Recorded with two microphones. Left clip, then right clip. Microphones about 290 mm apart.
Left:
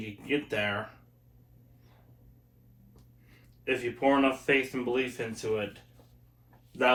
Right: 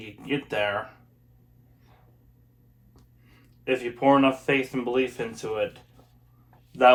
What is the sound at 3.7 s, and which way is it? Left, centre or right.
Speech, centre.